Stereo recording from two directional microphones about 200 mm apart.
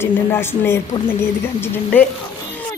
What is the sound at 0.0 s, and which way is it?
Speech, 10° left (ahead or behind).